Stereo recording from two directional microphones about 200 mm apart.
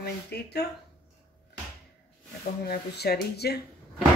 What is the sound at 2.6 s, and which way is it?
Speech, 55° left (ahead or behind).